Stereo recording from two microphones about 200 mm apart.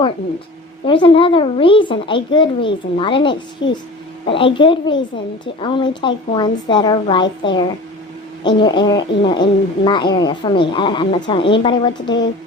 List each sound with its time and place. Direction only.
0.9 s speech: 25° left (ahead or behind)
3.6 s speech: 65° left (ahead or behind)
4.3 s speech: 25° left (ahead or behind)